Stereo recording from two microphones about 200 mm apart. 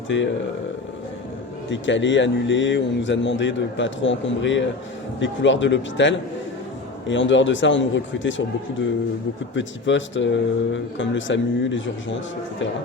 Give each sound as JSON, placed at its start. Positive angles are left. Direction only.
{"t": 0.1, "sound": "speech", "side_deg": 65}
{"t": 1.7, "sound": "speech", "side_deg": 65}
{"t": 9.6, "sound": "speech", "side_deg": 65}